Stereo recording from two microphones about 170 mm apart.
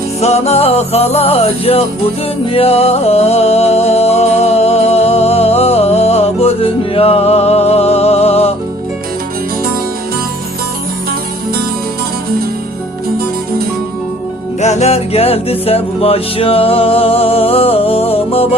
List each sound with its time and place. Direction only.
0.2 s music: 40° left (ahead or behind)
14.6 s music: 40° left (ahead or behind)